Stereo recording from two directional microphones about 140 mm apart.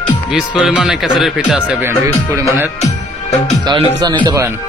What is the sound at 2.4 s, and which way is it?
Speech, 20° right (ahead or behind).